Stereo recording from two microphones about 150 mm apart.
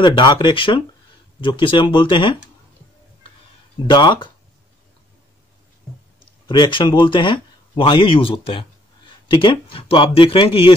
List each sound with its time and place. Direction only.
0.0 s speech: 30° left (ahead or behind)
3.9 s speech: 30° left (ahead or behind)
6.4 s speech: 30° left (ahead or behind)